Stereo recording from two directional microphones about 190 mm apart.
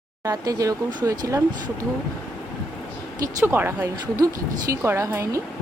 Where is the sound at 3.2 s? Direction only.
15° right (ahead or behind).